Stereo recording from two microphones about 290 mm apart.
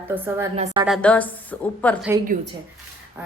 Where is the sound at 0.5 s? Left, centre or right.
Right.